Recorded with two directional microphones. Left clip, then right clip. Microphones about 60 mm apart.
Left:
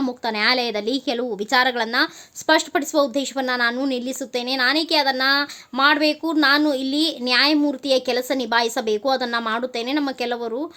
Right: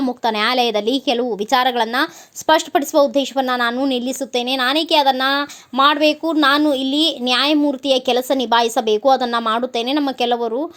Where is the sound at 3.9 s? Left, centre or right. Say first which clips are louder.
Right 5 dB; right.